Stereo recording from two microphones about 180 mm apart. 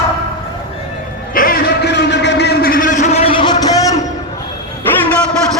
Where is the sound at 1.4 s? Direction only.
55° left (ahead or behind); by 4.0 s 20° left (ahead or behind).